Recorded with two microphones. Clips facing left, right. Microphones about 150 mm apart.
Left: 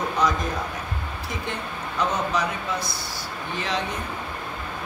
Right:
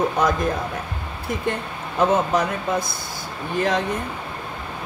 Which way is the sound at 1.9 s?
50° right (ahead or behind).